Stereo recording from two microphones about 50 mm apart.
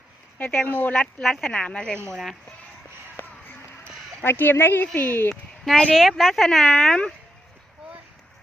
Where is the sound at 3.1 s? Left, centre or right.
Left.